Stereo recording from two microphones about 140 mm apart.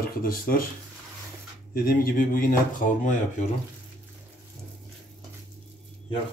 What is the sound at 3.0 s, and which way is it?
Speech, 65° left (ahead or behind).